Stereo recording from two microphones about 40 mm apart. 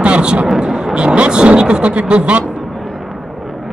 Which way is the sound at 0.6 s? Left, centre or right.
Right.